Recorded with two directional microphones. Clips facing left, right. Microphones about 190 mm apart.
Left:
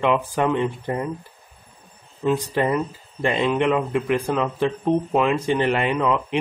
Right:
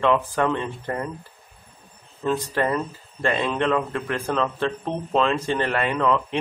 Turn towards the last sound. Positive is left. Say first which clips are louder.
# left 1 dB
turn(degrees=15)  # may be behind; listen again after turning